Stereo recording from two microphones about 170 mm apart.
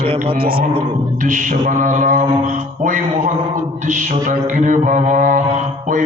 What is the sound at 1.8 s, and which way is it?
Mantra, 50° right (ahead or behind).